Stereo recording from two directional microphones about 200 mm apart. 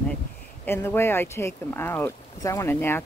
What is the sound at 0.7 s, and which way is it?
Speech, 10° left (ahead or behind).